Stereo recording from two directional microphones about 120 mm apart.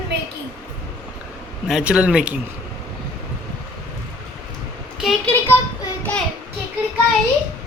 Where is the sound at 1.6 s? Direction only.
5° right (ahead or behind).